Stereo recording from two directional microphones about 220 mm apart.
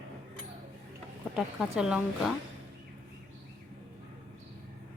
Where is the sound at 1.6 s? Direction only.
5° right (ahead or behind).